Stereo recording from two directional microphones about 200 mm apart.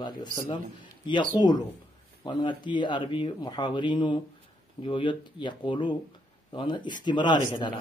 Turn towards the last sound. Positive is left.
turn(degrees=20)  # may be behind; listen again after turning